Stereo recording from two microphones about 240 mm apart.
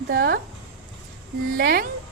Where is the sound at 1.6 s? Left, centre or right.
Right.